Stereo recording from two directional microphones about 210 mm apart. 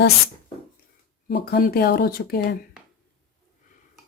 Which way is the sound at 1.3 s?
45° left (ahead or behind).